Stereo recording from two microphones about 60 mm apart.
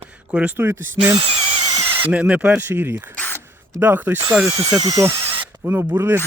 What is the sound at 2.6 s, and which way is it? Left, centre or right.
Speech, right.